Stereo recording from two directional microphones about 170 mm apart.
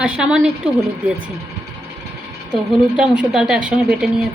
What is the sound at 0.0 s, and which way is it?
A woman's voice, 5° right (ahead or behind).